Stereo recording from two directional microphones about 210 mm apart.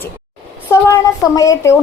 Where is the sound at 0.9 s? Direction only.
15° left (ahead or behind).